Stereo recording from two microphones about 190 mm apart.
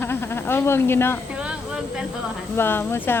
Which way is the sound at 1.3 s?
5° right (ahead or behind).